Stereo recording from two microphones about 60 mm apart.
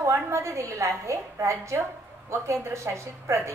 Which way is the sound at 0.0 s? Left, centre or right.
Right.